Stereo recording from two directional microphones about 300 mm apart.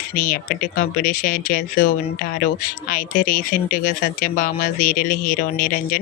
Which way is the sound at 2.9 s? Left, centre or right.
Left.